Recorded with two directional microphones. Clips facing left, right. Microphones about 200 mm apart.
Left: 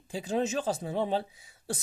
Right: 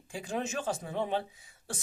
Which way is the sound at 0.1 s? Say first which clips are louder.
Left 5 dB; 35° left (ahead or behind).